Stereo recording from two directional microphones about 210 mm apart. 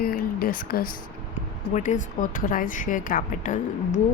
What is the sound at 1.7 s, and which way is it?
A woman's voice, 35° left (ahead or behind).